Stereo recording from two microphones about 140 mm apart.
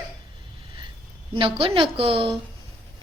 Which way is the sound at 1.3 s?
40° right (ahead or behind).